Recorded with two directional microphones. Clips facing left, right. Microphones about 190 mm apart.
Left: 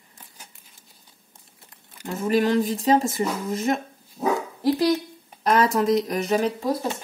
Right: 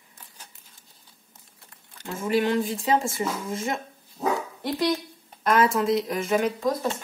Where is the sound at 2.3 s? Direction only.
40° left (ahead or behind).